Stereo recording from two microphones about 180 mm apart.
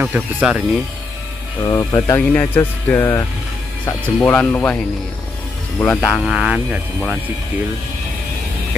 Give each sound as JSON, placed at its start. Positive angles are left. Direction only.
{"t": 0.0, "sound": "speech", "side_deg": -5}
{"t": 1.6, "sound": "speech", "side_deg": 20}
{"t": 6.3, "sound": "speech", "side_deg": -5}